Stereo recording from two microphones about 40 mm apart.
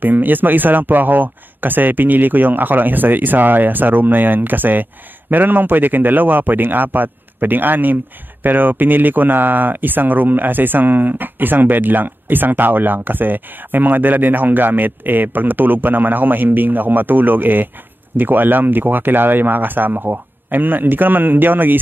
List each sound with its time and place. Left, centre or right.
0.0 s a man's voice: right